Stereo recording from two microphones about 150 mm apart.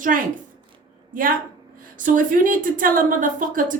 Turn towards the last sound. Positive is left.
turn(degrees=-60)  # may be behind; listen again after turning